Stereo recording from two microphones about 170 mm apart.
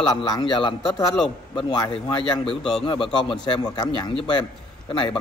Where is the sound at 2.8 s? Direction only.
30° left (ahead or behind).